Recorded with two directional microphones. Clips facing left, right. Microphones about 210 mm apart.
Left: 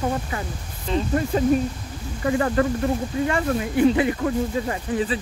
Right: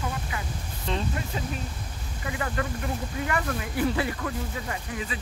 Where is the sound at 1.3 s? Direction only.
45° left (ahead or behind).